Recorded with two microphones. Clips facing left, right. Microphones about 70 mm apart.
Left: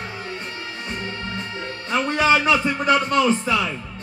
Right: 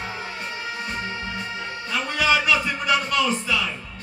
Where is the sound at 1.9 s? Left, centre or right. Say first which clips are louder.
Left 4 dB; left.